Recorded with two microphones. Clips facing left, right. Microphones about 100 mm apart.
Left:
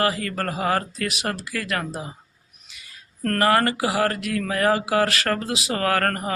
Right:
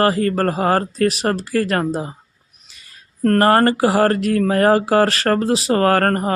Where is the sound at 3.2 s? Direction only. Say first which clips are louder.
Right 6 dB; 40° right (ahead or behind).